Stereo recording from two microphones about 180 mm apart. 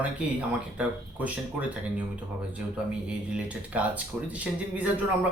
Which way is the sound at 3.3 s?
10° right (ahead or behind).